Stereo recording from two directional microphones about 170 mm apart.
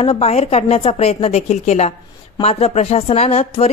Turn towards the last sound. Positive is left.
turn(degrees=40)  # may be behind; listen again after turning